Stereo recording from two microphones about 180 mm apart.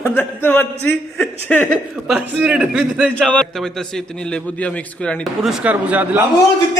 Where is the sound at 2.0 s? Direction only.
5° right (ahead or behind).